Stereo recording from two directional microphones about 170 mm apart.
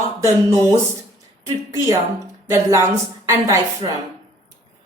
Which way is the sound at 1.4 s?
20° right (ahead or behind).